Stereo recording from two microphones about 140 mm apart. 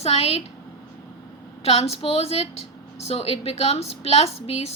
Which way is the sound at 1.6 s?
45° left (ahead or behind).